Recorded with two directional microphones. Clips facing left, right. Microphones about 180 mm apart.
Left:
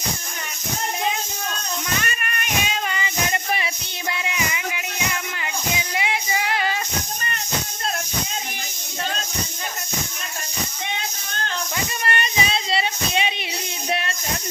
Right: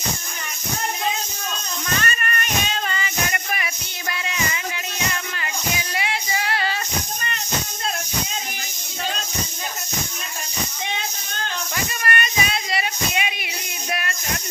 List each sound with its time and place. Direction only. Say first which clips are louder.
2.0 s child singing: right 3 dB; 10° left (ahead or behind); by 3.7 s 25° left (ahead or behind)
4.1 s music: even; 15° left (ahead or behind)
12.0 s child singing: even; 25° left (ahead or behind)